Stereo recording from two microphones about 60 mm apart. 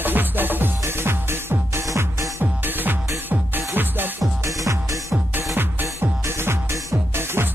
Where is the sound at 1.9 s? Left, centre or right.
Right.